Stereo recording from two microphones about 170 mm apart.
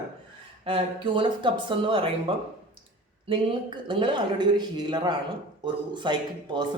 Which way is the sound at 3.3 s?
30° right (ahead or behind).